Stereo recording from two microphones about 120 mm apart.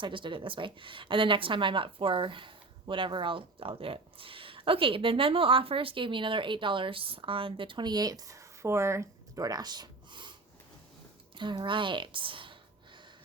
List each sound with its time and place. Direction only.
0.0 s a woman's voice: 45° right (ahead or behind)
11.3 s a woman's voice: 40° right (ahead or behind)